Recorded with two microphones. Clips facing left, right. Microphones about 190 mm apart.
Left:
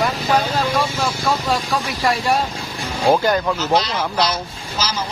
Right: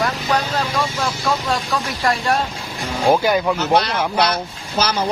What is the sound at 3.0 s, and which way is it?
Speech, 10° right (ahead or behind).